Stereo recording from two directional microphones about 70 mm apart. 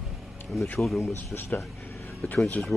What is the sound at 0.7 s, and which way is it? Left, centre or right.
Speech, centre.